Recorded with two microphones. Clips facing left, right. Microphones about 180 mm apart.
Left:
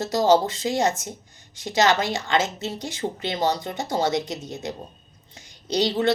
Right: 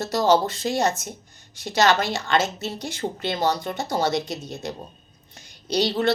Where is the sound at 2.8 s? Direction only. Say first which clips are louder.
Even; 65° right (ahead or behind).